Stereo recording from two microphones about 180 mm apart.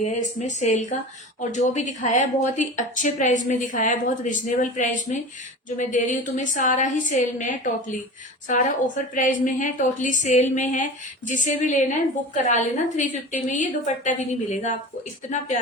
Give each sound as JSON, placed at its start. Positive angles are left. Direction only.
{"t": 0.0, "sound": "speech", "side_deg": 40}